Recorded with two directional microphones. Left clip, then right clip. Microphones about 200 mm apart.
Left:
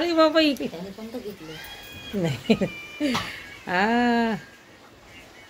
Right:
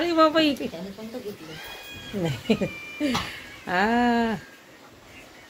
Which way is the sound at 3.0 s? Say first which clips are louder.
Left 1 dB; 10° left (ahead or behind).